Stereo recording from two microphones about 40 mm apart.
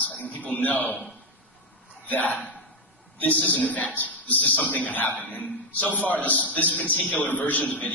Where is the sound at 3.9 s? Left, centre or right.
Left.